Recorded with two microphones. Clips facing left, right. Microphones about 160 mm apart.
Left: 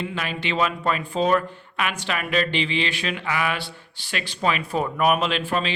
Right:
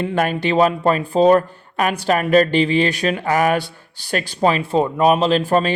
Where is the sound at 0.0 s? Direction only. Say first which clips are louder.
Right 9 dB; 50° right (ahead or behind).